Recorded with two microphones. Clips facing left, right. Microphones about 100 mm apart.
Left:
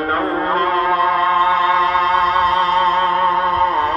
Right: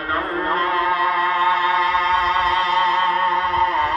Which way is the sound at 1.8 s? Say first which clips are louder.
Left 3 dB; 45° left (ahead or behind).